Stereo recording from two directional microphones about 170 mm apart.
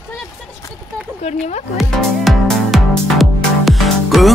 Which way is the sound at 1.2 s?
45° left (ahead or behind).